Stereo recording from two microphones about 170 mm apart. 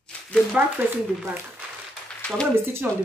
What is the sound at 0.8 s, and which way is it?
Speech, 10° right (ahead or behind).